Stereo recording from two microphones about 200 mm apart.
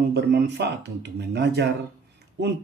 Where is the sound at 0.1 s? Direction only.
55° right (ahead or behind).